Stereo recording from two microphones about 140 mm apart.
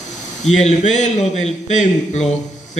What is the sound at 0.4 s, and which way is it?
A man's voice, 55° left (ahead or behind).